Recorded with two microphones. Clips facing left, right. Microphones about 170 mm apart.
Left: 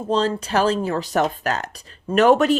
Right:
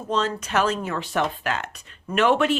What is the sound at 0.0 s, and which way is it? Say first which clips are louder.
Speech: left 4 dB; 30° left (ahead or behind).